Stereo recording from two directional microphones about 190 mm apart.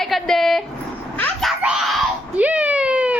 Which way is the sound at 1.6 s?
5° right (ahead or behind).